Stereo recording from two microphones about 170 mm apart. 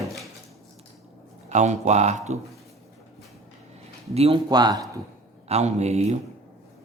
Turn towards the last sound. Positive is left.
turn(degrees=-40)  # may be behind; listen again after turning